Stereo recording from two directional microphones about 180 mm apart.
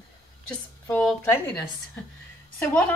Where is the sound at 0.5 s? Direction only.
5° left (ahead or behind).